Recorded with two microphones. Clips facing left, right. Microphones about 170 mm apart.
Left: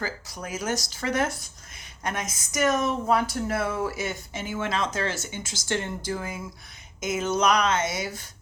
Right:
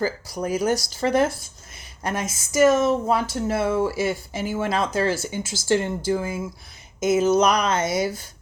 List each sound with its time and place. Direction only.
0.3 s speech: 35° right (ahead or behind)